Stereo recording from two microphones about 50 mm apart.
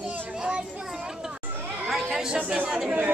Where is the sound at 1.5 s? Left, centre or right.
Right.